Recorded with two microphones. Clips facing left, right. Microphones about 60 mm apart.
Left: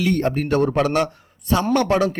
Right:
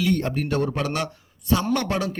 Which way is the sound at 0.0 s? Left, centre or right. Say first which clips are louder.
Left 3 dB; left.